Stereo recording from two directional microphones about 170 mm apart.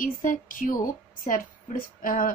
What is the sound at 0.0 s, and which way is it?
A woman's voice, 50° left (ahead or behind).